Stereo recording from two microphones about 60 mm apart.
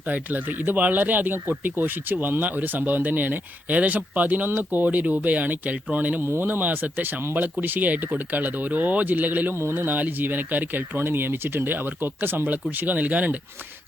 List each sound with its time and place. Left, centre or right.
0.0 s speech: right
6.2 s speech: right
6.5 s speech: right